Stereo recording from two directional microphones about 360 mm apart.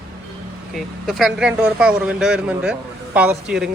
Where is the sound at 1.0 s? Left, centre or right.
Centre.